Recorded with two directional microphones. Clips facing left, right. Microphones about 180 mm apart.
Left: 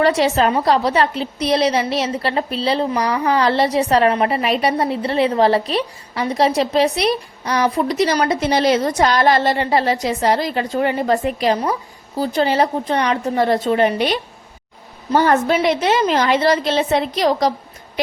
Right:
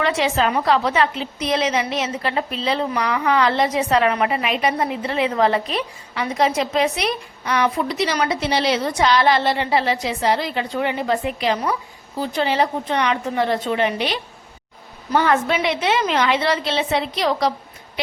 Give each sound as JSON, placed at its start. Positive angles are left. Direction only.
{"t": 0.0, "sound": "a woman's voice", "side_deg": 40}